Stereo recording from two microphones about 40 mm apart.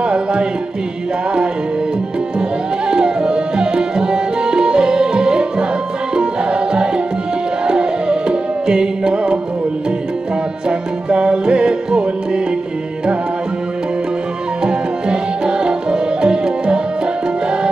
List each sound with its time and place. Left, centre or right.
0.0 s music: right
2.9 s music: right
10.7 s music: right
14.6 s music: right